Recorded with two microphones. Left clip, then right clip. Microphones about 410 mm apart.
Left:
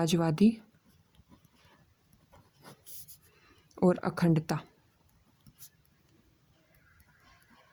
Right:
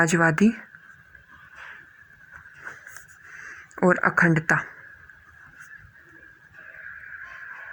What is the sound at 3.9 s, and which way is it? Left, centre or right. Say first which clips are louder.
Speech: right 15 dB; left.